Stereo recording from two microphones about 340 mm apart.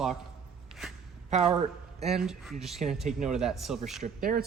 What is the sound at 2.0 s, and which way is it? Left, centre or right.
Speech, centre.